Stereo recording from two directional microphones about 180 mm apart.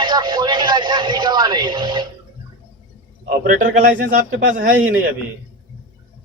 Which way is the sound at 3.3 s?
45° right (ahead or behind).